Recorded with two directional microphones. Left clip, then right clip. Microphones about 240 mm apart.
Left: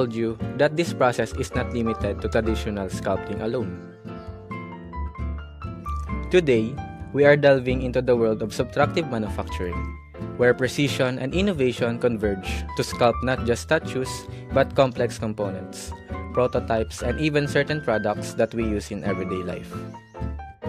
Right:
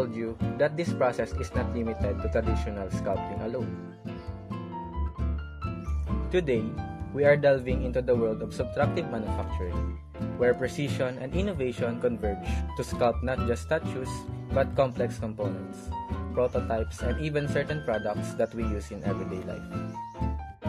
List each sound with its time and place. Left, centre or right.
0.0 s speech: left
6.3 s speech: left